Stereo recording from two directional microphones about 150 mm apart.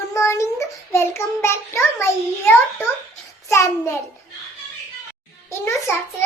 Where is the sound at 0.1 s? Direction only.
20° left (ahead or behind).